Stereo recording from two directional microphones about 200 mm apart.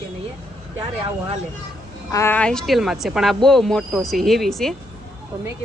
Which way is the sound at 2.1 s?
15° left (ahead or behind).